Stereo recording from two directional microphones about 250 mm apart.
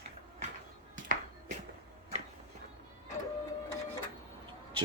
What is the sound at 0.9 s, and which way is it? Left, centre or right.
Music, right.